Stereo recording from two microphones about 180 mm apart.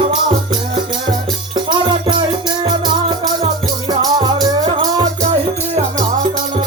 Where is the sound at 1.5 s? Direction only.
25° right (ahead or behind).